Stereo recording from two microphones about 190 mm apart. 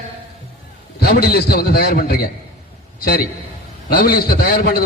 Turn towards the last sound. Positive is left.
turn(degrees=55)  # may be behind; listen again after turning